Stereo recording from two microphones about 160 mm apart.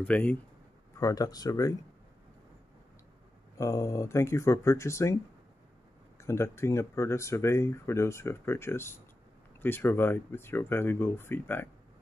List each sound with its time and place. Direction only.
0.0 s speech: 10° left (ahead or behind)
0.9 s speech: 20° left (ahead or behind)
3.5 s speech: 20° left (ahead or behind)
6.1 s speech: 15° left (ahead or behind)